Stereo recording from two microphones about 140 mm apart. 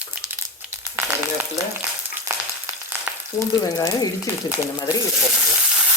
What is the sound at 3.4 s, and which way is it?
Speech, 25° left (ahead or behind).